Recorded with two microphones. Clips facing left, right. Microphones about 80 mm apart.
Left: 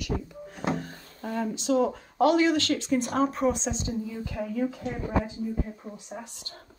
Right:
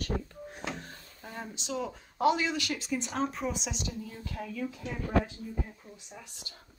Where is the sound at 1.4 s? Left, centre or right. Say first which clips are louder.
Left 11 dB; right.